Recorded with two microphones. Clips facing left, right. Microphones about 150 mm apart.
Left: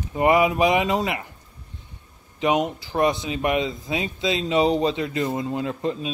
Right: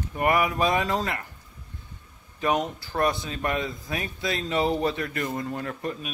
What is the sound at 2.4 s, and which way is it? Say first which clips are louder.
Speech: left 4 dB; 20° left (ahead or behind).